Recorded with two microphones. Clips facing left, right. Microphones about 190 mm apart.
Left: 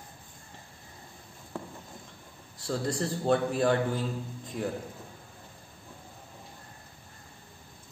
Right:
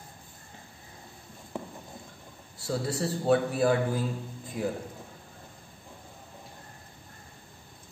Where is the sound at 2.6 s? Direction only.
5° right (ahead or behind).